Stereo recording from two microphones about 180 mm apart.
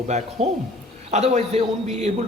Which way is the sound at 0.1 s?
40° right (ahead or behind).